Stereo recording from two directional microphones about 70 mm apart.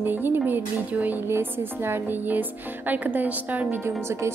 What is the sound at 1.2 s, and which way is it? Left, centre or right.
A woman's voice, right.